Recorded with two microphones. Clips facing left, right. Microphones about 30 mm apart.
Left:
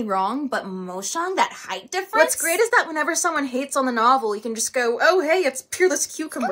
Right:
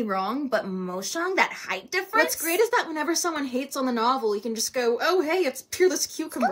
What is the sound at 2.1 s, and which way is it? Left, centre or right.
Speech, left.